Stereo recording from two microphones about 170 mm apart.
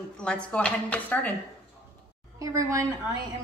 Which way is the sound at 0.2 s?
5° left (ahead or behind).